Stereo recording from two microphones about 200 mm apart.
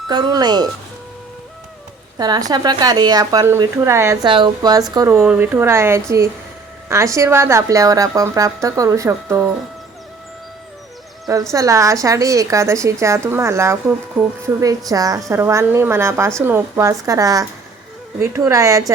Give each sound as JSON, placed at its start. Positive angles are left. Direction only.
{"t": 0.1, "sound": "a woman's voice", "side_deg": -20}
{"t": 2.1, "sound": "a woman's voice", "side_deg": -20}
{"t": 11.5, "sound": "a woman's voice", "side_deg": -15}